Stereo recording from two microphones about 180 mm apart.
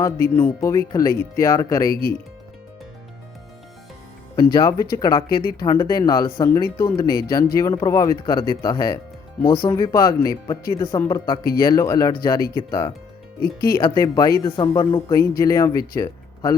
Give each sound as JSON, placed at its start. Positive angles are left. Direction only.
{"t": 0.0, "sound": "speech", "side_deg": 10}
{"t": 4.5, "sound": "speech", "side_deg": 20}
{"t": 13.4, "sound": "speech", "side_deg": 55}
{"t": 13.7, "sound": "speech", "side_deg": 20}
{"t": 16.0, "sound": "a sound", "side_deg": 20}